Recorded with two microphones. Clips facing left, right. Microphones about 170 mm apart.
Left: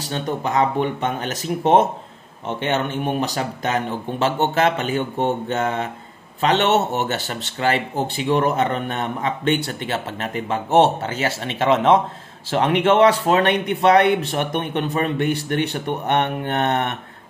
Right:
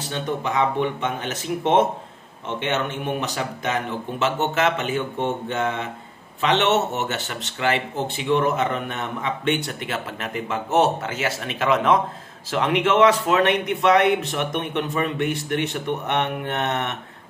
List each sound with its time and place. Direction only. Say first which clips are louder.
0.1 s speech: left 3 dB; 40° left (ahead or behind)